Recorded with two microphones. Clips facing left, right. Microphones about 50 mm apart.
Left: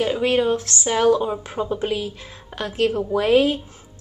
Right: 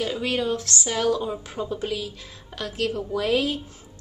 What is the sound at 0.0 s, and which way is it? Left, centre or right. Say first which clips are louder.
A woman's voice: left 6 dB; left.